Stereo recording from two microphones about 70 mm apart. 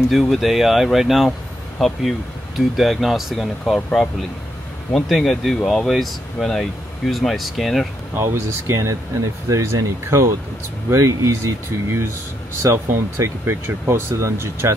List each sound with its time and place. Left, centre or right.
0.1 s speech: centre
8.2 s speech: right